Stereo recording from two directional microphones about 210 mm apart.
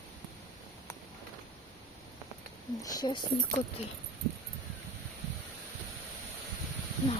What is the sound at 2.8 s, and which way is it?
Speech, 20° left (ahead or behind).